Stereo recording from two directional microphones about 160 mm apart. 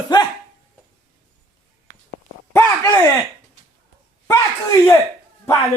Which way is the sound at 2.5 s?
15° left (ahead or behind).